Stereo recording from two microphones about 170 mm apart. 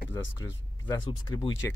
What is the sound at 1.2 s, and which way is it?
Speech, 25° left (ahead or behind).